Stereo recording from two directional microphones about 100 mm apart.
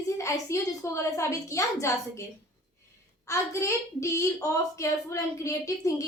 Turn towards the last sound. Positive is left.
turn(degrees=30)  # may be behind; listen again after turning